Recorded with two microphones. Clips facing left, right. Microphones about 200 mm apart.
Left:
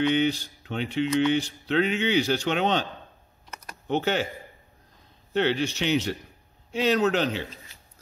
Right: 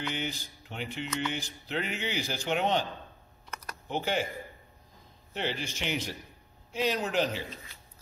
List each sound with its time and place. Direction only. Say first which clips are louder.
0.1 s speech: left 12 dB; 75° left (ahead or behind)
5.3 s a man's voice: left 10 dB; 75° left (ahead or behind)